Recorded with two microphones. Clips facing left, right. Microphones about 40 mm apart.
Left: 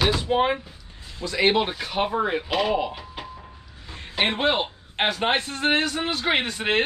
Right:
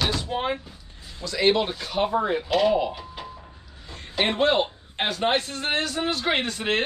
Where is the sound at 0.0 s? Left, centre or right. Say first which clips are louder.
Left 5 dB; centre.